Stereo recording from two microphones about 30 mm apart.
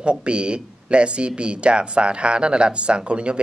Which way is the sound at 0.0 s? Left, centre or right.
Right.